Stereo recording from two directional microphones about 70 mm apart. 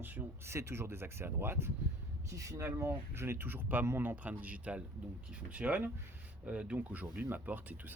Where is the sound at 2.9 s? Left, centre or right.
Right.